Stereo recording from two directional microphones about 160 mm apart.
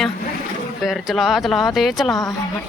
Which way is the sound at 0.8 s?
Centre (ahead or behind).